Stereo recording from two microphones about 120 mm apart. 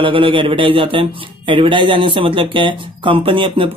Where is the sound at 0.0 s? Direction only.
45° right (ahead or behind).